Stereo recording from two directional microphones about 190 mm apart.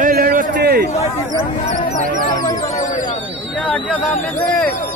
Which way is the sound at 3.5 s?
10° left (ahead or behind).